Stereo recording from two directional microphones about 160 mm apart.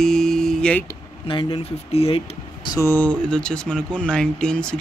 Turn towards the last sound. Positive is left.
turn(degrees=5)  # may be behind; listen again after turning